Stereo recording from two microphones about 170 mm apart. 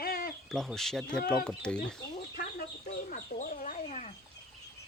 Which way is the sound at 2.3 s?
55° left (ahead or behind).